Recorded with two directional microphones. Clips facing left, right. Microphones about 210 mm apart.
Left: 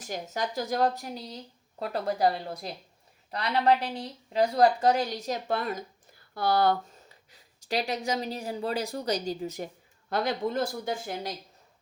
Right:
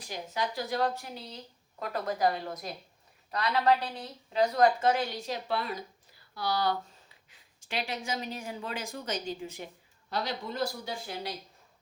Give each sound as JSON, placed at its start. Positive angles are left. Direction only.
{"t": 0.0, "sound": "speech", "side_deg": 45}
{"t": 1.8, "sound": "a woman's voice", "side_deg": 30}
{"t": 10.1, "sound": "speech", "side_deg": 50}